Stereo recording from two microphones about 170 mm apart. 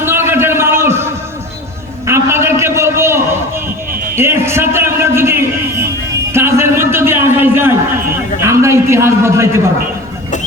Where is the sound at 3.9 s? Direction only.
60° right (ahead or behind).